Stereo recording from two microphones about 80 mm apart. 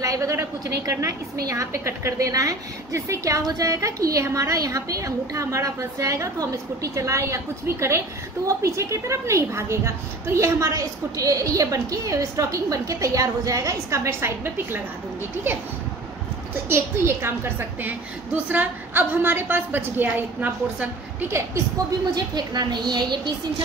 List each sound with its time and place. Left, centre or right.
0.0 s a woman's voice: right
16.6 s a woman's voice: right
22.1 s a woman's voice: right